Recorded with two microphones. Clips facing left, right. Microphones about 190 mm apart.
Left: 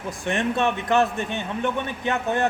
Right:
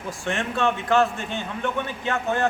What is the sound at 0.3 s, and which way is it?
A man's voice, 20° left (ahead or behind).